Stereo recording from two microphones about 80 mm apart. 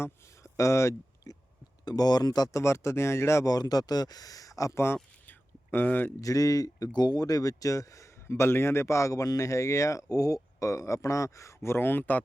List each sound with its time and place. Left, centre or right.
0.0 s a sound: left
1.8 s speech: left
2.6 s a man's voice: left
3.4 s speech: left
5.7 s speech: left
6.1 s speech: left
6.9 s a man's voice: left